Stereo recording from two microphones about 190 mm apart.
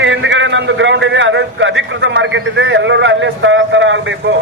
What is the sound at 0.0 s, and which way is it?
A man's voice, 70° right (ahead or behind).